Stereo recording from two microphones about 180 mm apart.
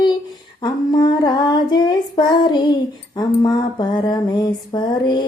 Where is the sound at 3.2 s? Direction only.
25° left (ahead or behind).